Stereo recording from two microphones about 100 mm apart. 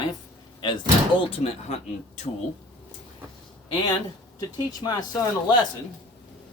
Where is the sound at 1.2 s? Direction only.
85° left.